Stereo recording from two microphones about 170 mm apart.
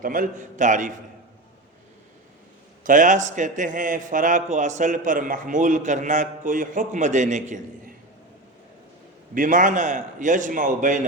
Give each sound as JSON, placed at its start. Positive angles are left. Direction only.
{"t": 0.0, "sound": "a man's voice", "side_deg": -55}
{"t": 2.8, "sound": "a man's voice", "side_deg": -50}
{"t": 9.3, "sound": "a man's voice", "side_deg": -50}